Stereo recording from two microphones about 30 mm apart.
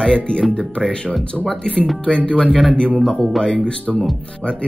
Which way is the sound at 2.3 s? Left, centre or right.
Left.